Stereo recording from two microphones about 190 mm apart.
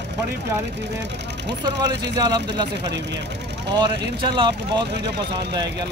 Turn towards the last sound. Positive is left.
turn(degrees=-25)  # may be behind; listen again after turning